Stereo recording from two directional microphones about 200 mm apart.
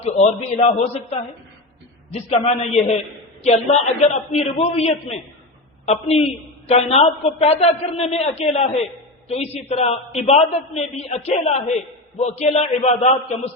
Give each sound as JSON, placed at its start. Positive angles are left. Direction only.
{"t": 0.0, "sound": "a man's voice", "side_deg": 30}